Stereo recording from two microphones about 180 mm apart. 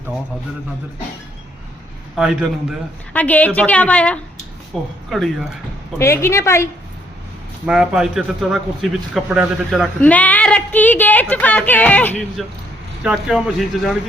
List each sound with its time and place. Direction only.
2.1 s a man's voice: 5° right (ahead or behind)
3.1 s speech: 10° left (ahead or behind)
6.0 s speech: 15° left (ahead or behind)
7.7 s a man's voice: 5° right (ahead or behind)
10.0 s speech: 10° left (ahead or behind)
13.0 s a man's voice: 5° right (ahead or behind)